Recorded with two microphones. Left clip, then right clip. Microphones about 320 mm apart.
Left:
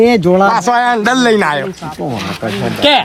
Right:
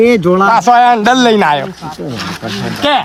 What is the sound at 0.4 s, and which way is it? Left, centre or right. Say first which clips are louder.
Speech: right 4 dB; centre.